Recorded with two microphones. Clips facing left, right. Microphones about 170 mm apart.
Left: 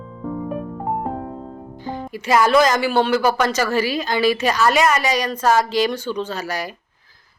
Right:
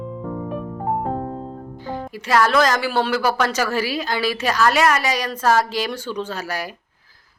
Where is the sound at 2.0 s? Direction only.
Centre (ahead or behind).